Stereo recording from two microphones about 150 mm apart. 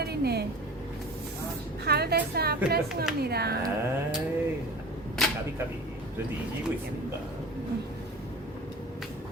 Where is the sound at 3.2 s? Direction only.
90° right.